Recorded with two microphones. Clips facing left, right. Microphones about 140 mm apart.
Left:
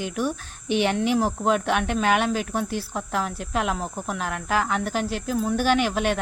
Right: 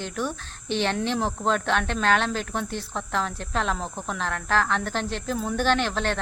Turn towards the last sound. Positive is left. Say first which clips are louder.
# left 2 dB
turn(degrees=10)  # may be behind; listen again after turning